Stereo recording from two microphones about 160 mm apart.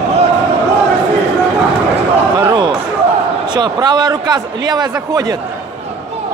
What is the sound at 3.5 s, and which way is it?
A man's voice, 25° right (ahead or behind).